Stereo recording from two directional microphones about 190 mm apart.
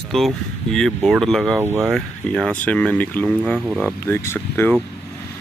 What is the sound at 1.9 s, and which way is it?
Speech, 5° left (ahead or behind).